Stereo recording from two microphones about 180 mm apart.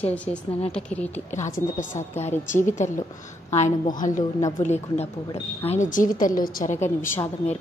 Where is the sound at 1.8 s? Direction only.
40° left (ahead or behind).